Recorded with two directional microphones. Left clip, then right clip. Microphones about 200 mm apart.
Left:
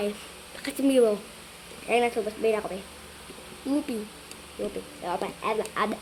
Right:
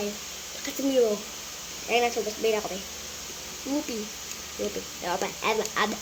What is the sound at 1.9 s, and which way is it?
Speech, 30° left (ahead or behind).